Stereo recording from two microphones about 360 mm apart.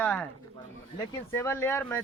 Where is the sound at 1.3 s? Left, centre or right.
Centre.